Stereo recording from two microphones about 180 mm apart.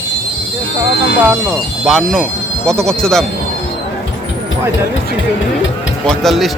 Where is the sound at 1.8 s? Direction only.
Centre (ahead or behind).